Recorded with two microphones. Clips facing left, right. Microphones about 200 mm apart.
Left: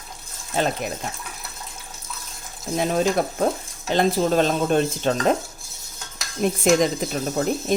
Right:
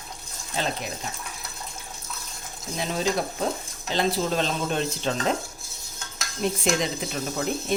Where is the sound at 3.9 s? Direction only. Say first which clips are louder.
Left 5 dB; 50° left (ahead or behind).